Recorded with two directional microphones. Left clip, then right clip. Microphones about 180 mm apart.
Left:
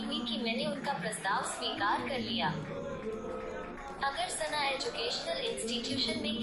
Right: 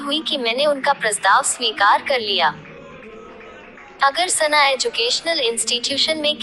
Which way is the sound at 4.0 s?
55° right (ahead or behind).